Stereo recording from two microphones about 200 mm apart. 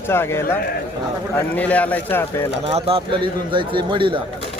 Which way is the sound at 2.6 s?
30° right (ahead or behind).